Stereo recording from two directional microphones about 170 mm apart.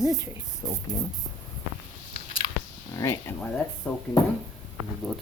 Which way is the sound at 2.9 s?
20° left (ahead or behind).